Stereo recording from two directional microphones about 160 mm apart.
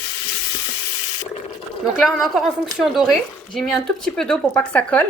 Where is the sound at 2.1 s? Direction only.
Centre (ahead or behind).